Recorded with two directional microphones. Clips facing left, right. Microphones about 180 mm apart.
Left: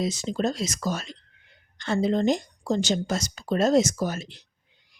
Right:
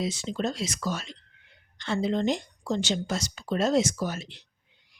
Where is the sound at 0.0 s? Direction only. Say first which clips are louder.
Left 3 dB; 40° left (ahead or behind).